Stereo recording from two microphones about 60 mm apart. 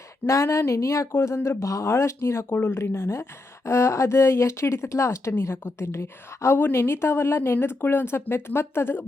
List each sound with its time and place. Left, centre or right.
0.3 s speech: left
1.1 s a woman's voice: left